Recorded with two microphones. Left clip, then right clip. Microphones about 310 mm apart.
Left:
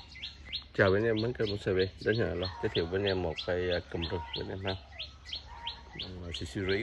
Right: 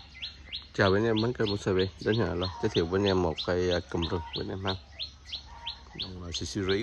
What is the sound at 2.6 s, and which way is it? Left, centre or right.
Speech, right.